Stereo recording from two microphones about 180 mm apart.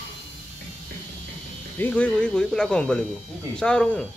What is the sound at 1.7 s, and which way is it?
Speech, 10° left (ahead or behind).